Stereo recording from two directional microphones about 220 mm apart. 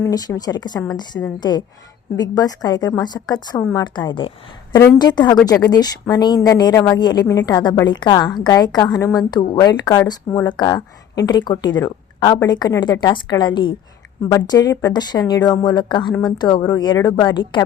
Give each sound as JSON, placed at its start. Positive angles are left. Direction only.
{"t": 0.0, "sound": "a woman's voice", "side_deg": 15}